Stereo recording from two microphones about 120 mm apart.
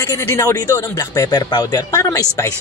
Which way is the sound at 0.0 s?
25° left (ahead or behind).